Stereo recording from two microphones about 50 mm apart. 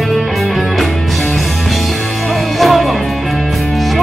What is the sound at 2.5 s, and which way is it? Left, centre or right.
Music, centre.